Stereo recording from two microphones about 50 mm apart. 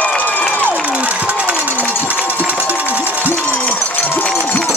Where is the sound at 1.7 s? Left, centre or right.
Left.